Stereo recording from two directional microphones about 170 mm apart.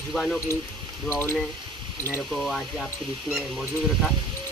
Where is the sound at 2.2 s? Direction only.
Centre (ahead or behind).